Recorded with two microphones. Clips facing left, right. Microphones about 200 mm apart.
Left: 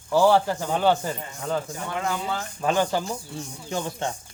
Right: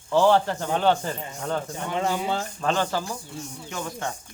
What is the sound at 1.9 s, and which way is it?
Speech, 30° right (ahead or behind).